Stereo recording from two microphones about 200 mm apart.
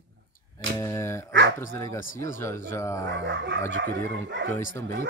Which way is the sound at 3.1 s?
60° right (ahead or behind).